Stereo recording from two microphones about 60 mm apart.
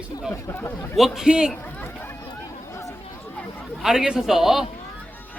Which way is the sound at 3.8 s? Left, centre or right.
Centre.